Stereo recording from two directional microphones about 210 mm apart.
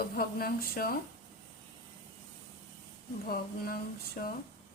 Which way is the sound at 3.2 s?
45° left (ahead or behind).